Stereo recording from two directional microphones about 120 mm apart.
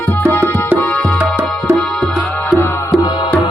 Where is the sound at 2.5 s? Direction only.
20° left (ahead or behind).